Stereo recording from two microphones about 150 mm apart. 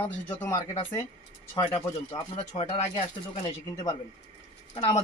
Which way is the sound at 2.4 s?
45° left (ahead or behind).